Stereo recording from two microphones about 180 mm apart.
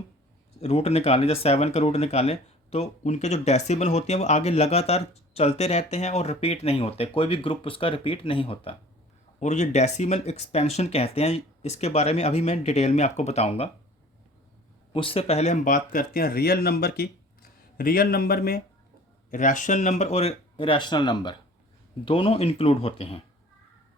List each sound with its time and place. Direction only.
0.6 s speech: 35° left (ahead or behind)
9.4 s speech: 40° left (ahead or behind)
14.9 s speech: 30° left (ahead or behind); by 18.6 s 55° left (ahead or behind)
19.3 s speech: 45° left (ahead or behind)